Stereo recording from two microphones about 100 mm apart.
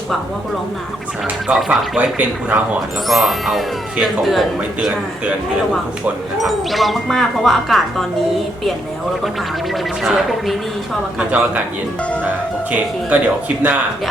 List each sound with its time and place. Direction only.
1.5 s speech: centre (ahead or behind)
2.0 s speech: 15° right (ahead or behind)
3.1 s speech: centre (ahead or behind)
6.4 s speech: centre (ahead or behind)
10.0 s speech: centre (ahead or behind)
11.2 s speech: 15° right (ahead or behind)
13.1 s speech: 15° right (ahead or behind)